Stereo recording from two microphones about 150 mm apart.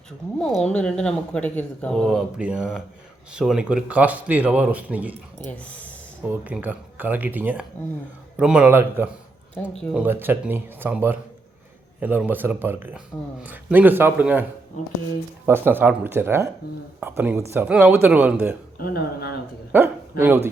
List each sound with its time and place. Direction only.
0.7 s speech: 5° left (ahead or behind); by 5.1 s 10° right (ahead or behind)
5.5 s speech: 10° left (ahead or behind)
6.2 s speech: 10° right (ahead or behind)
15.4 s speech: 15° right (ahead or behind)
18.8 s speech: 85° left
19.7 s speech: 15° right (ahead or behind)